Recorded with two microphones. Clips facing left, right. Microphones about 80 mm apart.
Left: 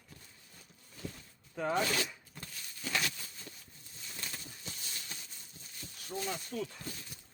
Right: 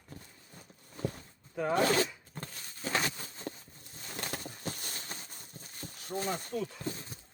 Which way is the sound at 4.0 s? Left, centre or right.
Right.